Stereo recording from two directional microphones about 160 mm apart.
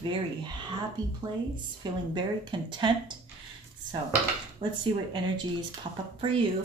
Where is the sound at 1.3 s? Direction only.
25° right (ahead or behind).